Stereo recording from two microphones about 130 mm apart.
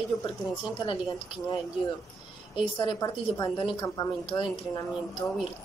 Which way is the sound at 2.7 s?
35° left (ahead or behind).